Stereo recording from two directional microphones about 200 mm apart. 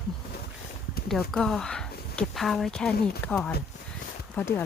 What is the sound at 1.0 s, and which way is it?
Speech, centre (ahead or behind).